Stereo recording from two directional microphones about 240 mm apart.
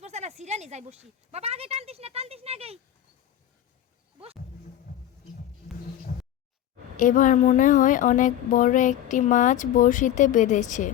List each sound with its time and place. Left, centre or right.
0.0 s speech: right
6.9 s a woman's voice: left